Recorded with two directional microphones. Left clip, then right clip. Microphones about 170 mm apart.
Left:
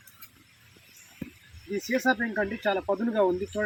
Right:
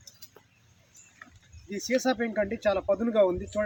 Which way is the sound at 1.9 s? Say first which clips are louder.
Left 1 dB; 25° right (ahead or behind).